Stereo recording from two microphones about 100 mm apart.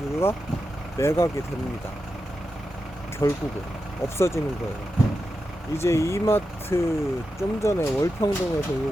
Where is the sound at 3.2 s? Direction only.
35° left (ahead or behind).